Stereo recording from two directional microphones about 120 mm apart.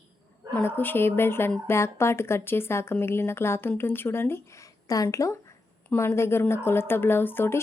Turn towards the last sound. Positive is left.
turn(degrees=20)  # may be behind; listen again after turning